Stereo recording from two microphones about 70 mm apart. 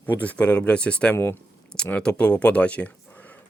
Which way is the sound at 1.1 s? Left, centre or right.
Left.